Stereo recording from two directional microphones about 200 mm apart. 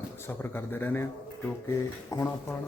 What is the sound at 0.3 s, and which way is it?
A man's voice, 10° left (ahead or behind).